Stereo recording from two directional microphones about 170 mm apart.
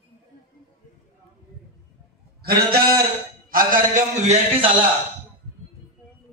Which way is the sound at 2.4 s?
65° right (ahead or behind).